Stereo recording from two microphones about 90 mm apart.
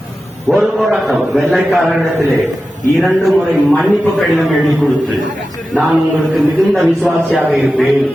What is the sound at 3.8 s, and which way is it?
Speech, centre (ahead or behind).